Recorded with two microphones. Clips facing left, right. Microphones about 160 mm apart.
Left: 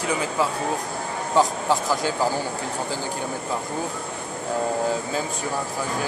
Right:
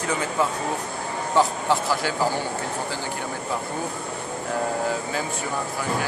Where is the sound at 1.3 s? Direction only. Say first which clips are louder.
Left 1 dB; 15° left (ahead or behind).